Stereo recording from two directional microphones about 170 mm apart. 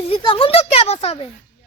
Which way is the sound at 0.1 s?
30° left (ahead or behind).